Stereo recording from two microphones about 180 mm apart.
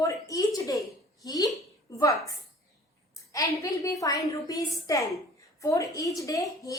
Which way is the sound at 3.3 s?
20° left (ahead or behind).